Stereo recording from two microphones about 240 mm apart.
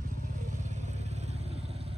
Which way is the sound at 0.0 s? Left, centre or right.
Right.